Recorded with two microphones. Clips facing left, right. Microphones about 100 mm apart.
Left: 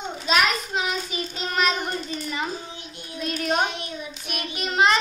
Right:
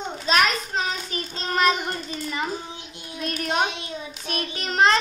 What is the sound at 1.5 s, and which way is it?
Child singing, 20° right (ahead or behind).